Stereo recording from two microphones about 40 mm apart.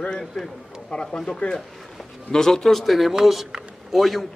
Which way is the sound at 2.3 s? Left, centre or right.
Centre.